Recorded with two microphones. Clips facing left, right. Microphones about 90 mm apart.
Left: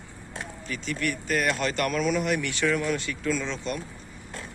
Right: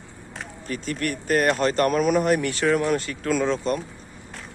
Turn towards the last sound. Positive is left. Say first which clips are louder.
# right 7 dB
turn(degrees=-40)  # may be behind; listen again after turning